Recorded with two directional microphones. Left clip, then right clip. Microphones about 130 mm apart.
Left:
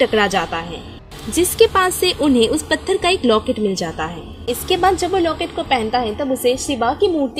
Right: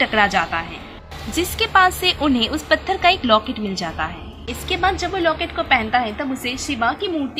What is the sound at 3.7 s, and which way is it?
A woman's voice, 50° left (ahead or behind).